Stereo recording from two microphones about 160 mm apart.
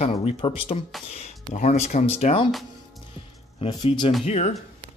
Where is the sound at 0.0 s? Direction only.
40° left (ahead or behind).